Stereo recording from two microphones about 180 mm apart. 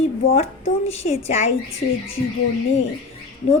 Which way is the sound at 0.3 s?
35° left (ahead or behind).